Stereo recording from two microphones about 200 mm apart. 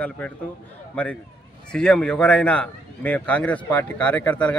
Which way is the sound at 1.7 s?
5° left (ahead or behind).